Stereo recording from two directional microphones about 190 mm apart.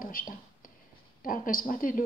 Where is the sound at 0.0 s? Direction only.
50° left (ahead or behind).